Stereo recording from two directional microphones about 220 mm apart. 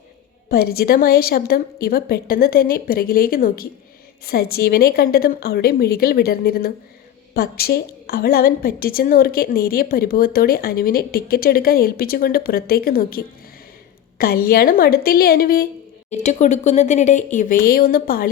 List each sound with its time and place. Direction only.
0.4 s a woman's voice: 45° left (ahead or behind)
16.0 s speech: 30° left (ahead or behind)